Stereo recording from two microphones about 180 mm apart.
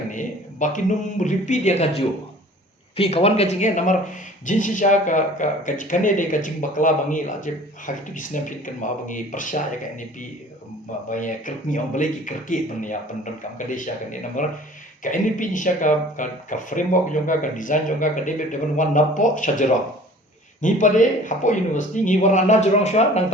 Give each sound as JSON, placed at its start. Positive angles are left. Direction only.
{"t": 0.1, "sound": "speech", "side_deg": 45}
{"t": 11.1, "sound": "speech", "side_deg": 45}